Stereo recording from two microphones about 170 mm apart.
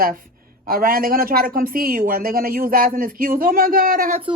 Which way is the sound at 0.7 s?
55° right (ahead or behind).